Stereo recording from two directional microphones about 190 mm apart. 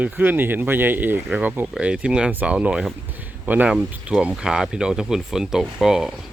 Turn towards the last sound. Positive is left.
turn(degrees=0)  # may be behind; listen again after turning